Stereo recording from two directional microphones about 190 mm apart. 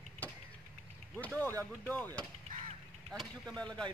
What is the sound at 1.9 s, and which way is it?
Speech, 10° left (ahead or behind).